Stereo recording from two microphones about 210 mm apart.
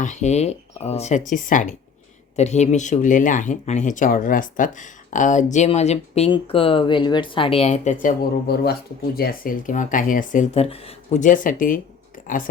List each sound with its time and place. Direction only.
0.0 s speech: 35° left (ahead or behind)